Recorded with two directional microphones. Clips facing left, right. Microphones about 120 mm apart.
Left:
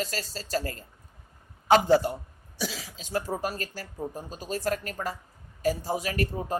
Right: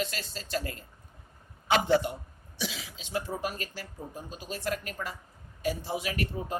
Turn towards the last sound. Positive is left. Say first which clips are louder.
# left 4 dB
turn(degrees=40)  # may be behind; listen again after turning